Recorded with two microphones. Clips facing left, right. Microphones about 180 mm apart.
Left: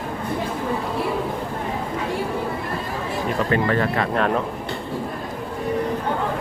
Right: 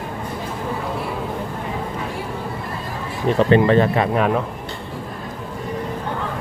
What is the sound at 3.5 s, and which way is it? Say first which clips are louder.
Speech: right 7 dB; 25° right (ahead or behind).